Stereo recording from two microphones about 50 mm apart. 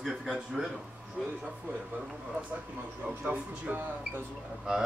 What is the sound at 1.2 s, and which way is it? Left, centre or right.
Speech, centre.